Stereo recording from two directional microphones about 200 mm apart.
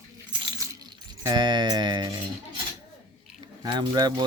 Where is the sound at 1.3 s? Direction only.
25° right (ahead or behind).